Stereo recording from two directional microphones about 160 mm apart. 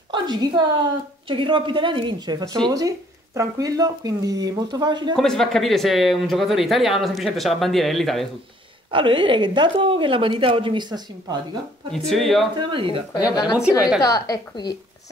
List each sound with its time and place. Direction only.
0.1 s a woman's voice: 30° right (ahead or behind)
5.1 s speech: centre (ahead or behind)
8.9 s a woman's voice: 30° right (ahead or behind)
11.9 s speech: centre (ahead or behind)
12.5 s a woman's voice: 30° right (ahead or behind)
13.6 s speech: 5° right (ahead or behind)
14.0 s a woman's voice: 20° left (ahead or behind)